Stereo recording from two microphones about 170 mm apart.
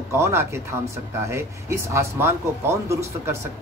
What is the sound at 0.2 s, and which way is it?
Speech, 15° right (ahead or behind).